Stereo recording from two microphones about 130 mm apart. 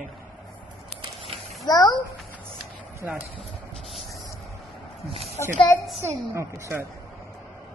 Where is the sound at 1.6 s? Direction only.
30° left (ahead or behind).